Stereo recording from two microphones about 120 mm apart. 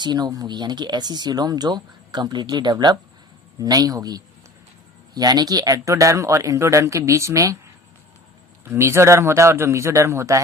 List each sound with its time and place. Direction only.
0.0 s speech: 35° right (ahead or behind)
8.6 s speech: 20° right (ahead or behind)